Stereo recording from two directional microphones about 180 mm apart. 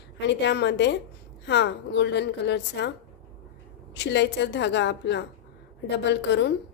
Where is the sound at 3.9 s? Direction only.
75° left (ahead or behind).